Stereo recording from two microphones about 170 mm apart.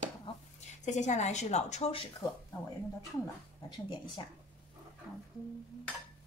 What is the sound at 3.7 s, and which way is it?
Speech, 30° left (ahead or behind).